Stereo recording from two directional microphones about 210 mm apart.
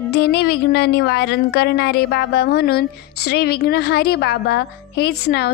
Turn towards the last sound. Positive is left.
turn(degrees=50)  # may be behind; listen again after turning